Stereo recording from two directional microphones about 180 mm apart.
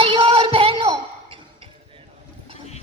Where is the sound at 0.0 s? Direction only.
30° right (ahead or behind).